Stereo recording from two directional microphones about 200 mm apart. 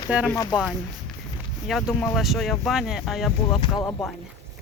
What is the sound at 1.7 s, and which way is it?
A woman's voice, centre (ahead or behind).